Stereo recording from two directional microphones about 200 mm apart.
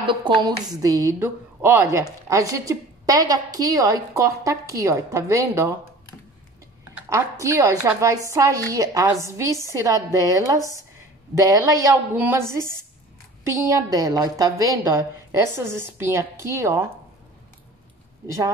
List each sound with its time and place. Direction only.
0.0 s a woman's voice: 25° right (ahead or behind)
7.1 s a woman's voice: 15° right (ahead or behind)
18.2 s speech: 15° right (ahead or behind)